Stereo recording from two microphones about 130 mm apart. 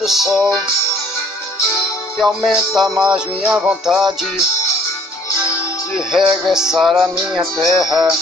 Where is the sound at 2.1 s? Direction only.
Centre (ahead or behind).